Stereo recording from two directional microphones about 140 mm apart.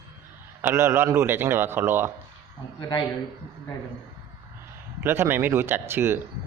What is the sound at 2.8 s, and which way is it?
Speech, 30° left (ahead or behind).